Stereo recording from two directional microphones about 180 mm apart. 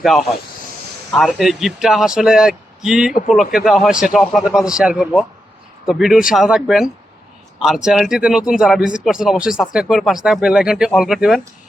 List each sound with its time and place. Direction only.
0.0 s speech: centre (ahead or behind)